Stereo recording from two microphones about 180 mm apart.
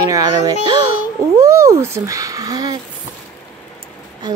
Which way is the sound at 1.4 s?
15° right (ahead or behind).